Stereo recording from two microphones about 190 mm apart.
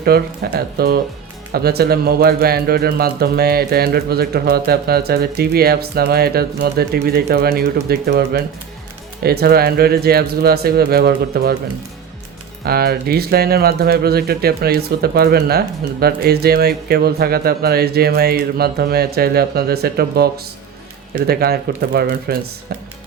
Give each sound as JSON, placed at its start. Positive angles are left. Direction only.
{"t": 0.0, "sound": "speech", "side_deg": -55}
{"t": 12.6, "sound": "speech", "side_deg": -55}